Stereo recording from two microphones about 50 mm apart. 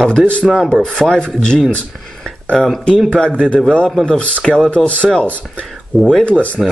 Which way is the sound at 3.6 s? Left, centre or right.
Centre.